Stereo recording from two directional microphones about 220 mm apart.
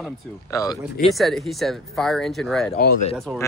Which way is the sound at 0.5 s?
15° left (ahead or behind).